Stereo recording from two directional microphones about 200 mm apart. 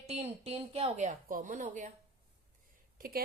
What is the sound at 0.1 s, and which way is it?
Speech, 30° right (ahead or behind).